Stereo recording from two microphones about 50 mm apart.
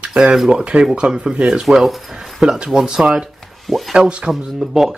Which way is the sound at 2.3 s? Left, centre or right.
Centre.